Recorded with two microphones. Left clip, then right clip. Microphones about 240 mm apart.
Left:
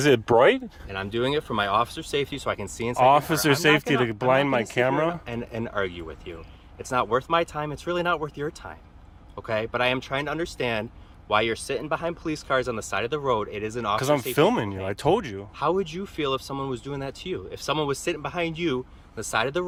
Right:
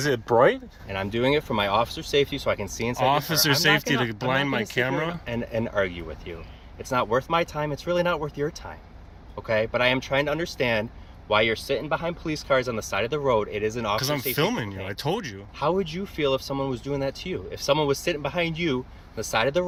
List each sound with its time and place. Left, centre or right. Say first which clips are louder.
0.0 s speech: left 2 dB; left
0.9 s speech: right 3 dB; centre; by 5.2 s left
5.2 s speech: right 4 dB; centre
9.5 s speech: right 2 dB; centre
14.0 s speech: left 4 dB; left
15.8 s speech: right 2 dB; centre